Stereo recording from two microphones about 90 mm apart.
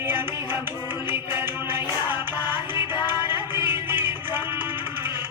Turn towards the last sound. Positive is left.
turn(degrees=-25)  # may be behind; listen again after turning